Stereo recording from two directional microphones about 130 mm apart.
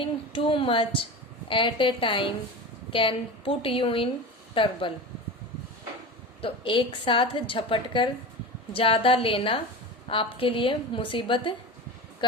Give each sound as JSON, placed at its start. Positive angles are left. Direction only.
{"t": 0.0, "sound": "a woman's voice", "side_deg": 40}
{"t": 6.4, "sound": "a woman's voice", "side_deg": 40}